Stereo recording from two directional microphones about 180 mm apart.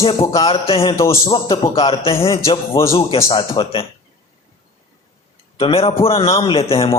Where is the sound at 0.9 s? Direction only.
15° left (ahead or behind).